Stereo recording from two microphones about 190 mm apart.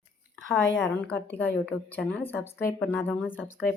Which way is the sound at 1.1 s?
10° left (ahead or behind).